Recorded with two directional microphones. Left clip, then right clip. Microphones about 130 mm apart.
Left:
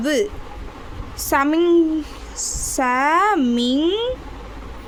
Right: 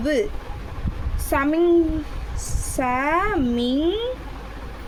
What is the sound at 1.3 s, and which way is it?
Speech, 50° left (ahead or behind).